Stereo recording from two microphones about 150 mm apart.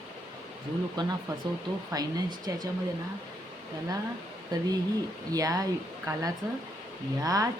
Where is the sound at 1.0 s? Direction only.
30° right (ahead or behind).